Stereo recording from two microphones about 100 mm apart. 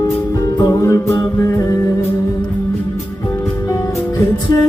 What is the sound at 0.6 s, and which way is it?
Music, 35° left (ahead or behind).